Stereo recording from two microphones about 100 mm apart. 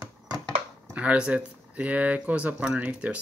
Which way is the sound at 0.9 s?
10° right (ahead or behind).